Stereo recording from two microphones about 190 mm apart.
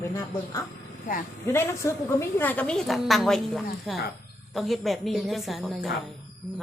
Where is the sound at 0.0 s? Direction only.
15° left (ahead or behind).